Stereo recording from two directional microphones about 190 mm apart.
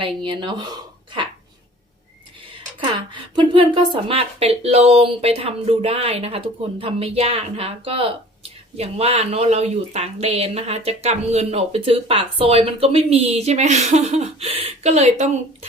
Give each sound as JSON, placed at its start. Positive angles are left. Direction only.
{"t": 0.0, "sound": "speech", "side_deg": -25}
{"t": 2.8, "sound": "speech", "side_deg": -25}